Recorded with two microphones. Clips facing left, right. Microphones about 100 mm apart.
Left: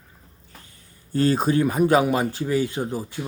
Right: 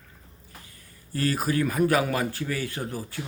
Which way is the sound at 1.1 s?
25° left (ahead or behind).